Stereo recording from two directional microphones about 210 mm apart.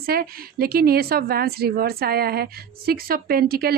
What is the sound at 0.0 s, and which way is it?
Speech, 45° right (ahead or behind).